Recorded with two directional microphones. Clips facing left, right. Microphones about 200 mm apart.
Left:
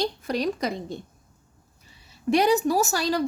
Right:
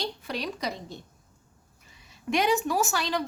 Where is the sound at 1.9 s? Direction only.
35° left (ahead or behind).